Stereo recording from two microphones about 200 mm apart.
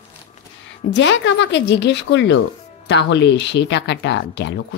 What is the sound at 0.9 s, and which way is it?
A woman's voice, 65° left (ahead or behind).